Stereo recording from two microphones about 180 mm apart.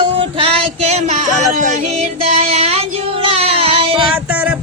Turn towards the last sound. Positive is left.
turn(degrees=-30)  # may be behind; listen again after turning